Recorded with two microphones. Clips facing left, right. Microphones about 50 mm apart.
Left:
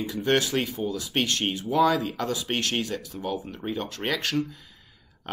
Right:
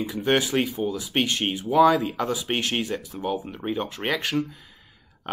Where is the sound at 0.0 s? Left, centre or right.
Centre.